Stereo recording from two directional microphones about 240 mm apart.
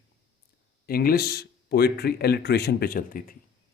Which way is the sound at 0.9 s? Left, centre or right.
Left.